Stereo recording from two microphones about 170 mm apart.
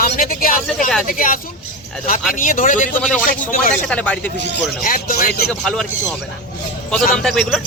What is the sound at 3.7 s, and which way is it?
Speech, 5° left (ahead or behind).